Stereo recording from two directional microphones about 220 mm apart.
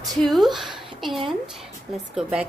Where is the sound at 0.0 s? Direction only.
Centre (ahead or behind).